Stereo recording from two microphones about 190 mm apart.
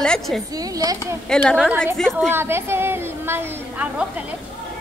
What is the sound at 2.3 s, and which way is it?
A woman's voice, 10° right (ahead or behind).